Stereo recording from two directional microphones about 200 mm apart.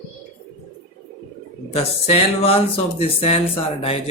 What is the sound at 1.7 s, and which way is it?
Speech, 30° left (ahead or behind).